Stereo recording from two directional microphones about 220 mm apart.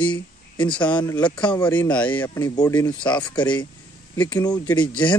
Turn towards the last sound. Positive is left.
turn(degrees=15)  # may be behind; listen again after turning